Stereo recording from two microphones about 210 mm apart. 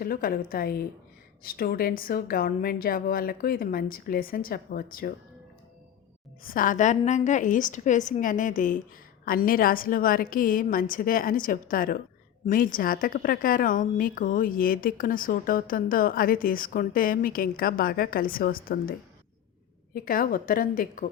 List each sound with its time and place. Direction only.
0.0 s a woman's voice: 45° left (ahead or behind)
6.4 s a woman's voice: 40° left (ahead or behind)